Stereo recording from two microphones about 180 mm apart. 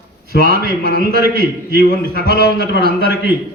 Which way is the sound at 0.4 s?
55° right (ahead or behind).